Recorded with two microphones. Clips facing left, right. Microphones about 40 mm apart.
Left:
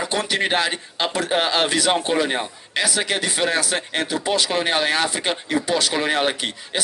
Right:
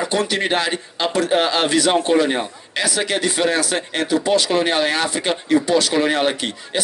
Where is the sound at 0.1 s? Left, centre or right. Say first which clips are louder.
Even; left.